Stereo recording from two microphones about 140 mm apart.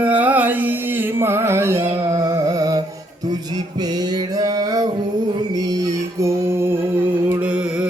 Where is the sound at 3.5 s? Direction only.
30° right (ahead or behind).